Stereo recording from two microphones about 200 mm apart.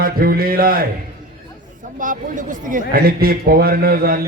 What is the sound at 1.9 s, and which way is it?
A man's voice, 40° right (ahead or behind).